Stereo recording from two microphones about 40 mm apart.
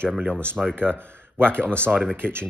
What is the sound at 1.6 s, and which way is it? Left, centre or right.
Speech, left.